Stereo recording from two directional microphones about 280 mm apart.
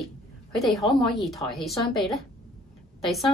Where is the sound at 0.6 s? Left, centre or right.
Centre.